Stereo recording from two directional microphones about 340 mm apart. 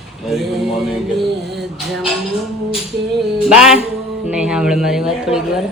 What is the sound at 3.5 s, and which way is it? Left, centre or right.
Speech, centre.